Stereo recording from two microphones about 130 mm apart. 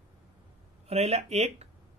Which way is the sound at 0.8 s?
55° right (ahead or behind).